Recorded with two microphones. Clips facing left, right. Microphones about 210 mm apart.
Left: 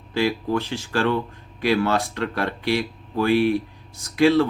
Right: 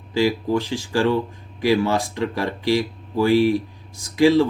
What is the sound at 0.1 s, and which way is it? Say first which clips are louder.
Speech: right 3 dB; 10° right (ahead or behind).